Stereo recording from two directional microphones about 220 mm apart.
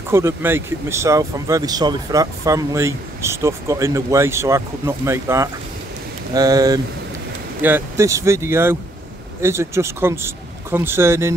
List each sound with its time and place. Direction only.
0.1 s speech: 10° right (ahead or behind)